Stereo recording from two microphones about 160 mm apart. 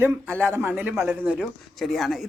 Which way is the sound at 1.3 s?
Centre (ahead or behind).